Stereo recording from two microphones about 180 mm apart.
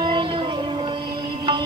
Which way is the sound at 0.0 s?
25° right (ahead or behind).